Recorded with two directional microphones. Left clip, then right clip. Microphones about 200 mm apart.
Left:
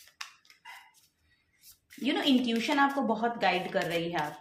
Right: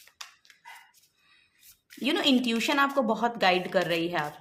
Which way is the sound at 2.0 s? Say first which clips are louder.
Right 3 dB; 45° right (ahead or behind).